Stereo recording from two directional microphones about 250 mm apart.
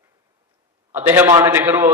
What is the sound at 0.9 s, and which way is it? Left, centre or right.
A man's voice, centre.